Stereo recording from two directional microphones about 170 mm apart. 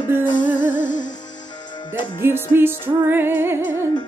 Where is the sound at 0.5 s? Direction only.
50° left (ahead or behind).